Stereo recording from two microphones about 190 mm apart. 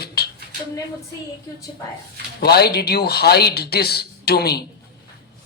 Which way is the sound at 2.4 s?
55° left (ahead or behind).